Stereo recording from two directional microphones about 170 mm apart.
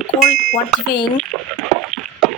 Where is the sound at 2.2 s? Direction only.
Centre (ahead or behind).